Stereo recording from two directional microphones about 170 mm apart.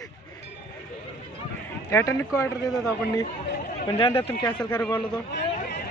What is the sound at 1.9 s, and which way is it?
Speech, 15° left (ahead or behind).